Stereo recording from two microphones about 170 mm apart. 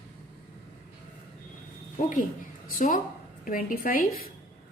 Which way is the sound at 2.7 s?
50° left (ahead or behind).